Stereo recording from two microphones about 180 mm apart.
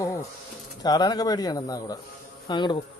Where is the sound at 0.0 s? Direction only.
15° left (ahead or behind).